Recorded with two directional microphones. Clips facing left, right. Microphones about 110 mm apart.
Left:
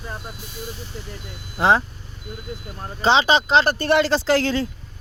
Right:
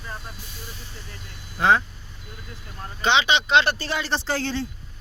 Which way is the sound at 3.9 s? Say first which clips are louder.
Left 9 dB; 80° left.